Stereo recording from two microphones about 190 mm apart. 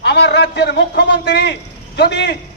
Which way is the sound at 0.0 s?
60° left (ahead or behind).